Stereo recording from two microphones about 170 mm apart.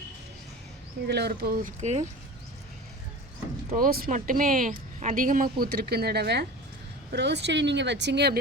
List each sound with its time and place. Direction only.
1.0 s speech: 75° right (ahead or behind); by 2.0 s 45° right (ahead or behind)
3.8 s speech: 60° right (ahead or behind)
7.1 s speech: 90° right